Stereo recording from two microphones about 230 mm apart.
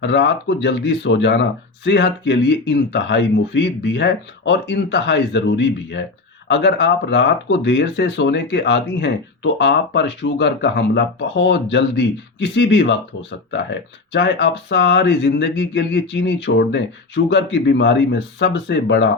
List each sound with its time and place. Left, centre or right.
0.0 s speech: left